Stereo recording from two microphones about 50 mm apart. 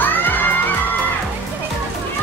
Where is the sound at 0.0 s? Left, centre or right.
Left.